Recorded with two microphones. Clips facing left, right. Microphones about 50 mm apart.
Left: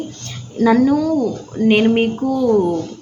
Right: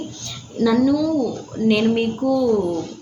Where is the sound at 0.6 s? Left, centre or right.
Left.